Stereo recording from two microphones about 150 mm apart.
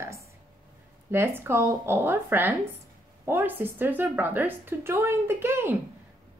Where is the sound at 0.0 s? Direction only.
20° right (ahead or behind).